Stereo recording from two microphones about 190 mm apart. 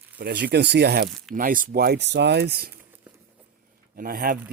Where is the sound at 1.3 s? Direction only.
45° right (ahead or behind).